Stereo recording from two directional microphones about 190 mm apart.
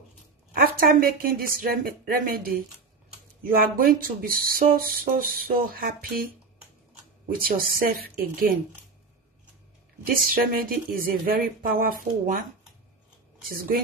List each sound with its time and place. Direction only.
0.6 s a woman's voice: 50° right (ahead or behind)
7.4 s a woman's voice: 50° right (ahead or behind)
10.0 s a woman's voice: 50° right (ahead or behind)